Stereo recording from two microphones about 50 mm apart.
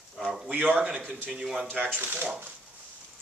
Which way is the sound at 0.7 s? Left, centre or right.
Right.